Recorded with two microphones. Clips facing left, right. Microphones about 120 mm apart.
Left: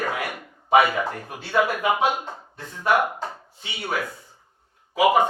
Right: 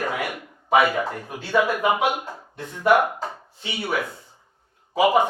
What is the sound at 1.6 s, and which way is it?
Speech, 15° right (ahead or behind).